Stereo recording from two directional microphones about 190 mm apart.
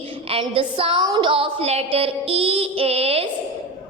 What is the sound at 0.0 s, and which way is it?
A woman's voice, 30° right (ahead or behind).